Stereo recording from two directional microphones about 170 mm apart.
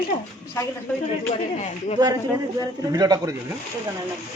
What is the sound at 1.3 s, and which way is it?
Speech, 40° left (ahead or behind).